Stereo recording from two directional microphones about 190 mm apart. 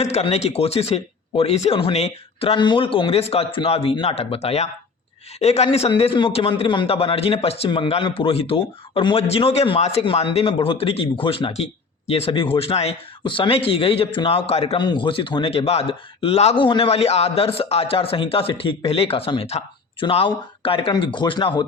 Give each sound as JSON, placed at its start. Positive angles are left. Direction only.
{"t": 0.0, "sound": "a man's voice", "side_deg": 35}